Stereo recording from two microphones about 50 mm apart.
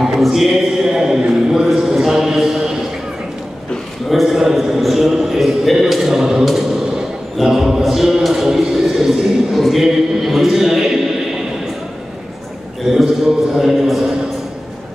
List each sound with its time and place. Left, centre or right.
0.0 s a sound: centre
4.1 s a man's voice: centre
12.9 s speech: centre